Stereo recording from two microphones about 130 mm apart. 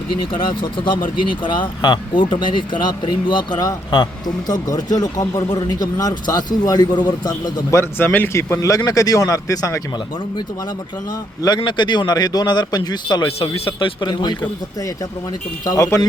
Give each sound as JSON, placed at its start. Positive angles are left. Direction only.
{"t": 1.3, "sound": "a man's voice", "side_deg": 40}
{"t": 7.8, "sound": "speech", "side_deg": 15}
{"t": 11.4, "sound": "a man's voice", "side_deg": 35}
{"t": 15.6, "sound": "speech", "side_deg": 25}